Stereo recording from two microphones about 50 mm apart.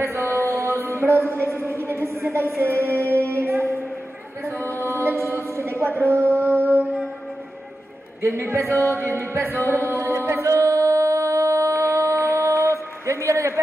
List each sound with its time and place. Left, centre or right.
0.0 s mantra: right
0.6 s music: right
1.4 s a sound: right
4.5 s music: right
6.5 s music: left
8.2 s music: right